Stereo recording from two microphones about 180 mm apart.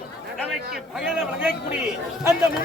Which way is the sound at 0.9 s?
5° right (ahead or behind).